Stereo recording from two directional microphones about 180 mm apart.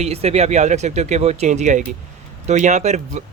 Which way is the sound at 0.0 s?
35° right (ahead or behind).